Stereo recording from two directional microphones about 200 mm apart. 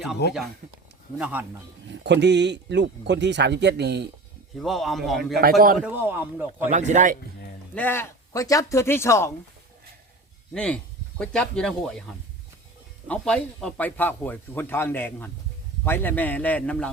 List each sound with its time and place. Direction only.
0.2 s speech: 55° left (ahead or behind)
0.6 s a sound: 45° right (ahead or behind)
1.2 s speech: 10° right (ahead or behind)
1.9 s speech: 60° right (ahead or behind)
4.5 s speech: centre (ahead or behind)
6.6 s speech: 35° right (ahead or behind)
7.8 s speech: 10° left (ahead or behind)
10.5 s speech: 5° left (ahead or behind)